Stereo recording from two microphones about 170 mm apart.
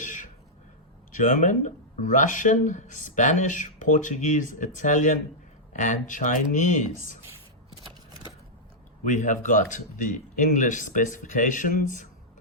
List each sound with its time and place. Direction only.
1.1 s speech: 50° left (ahead or behind)
9.0 s speech: 50° left (ahead or behind)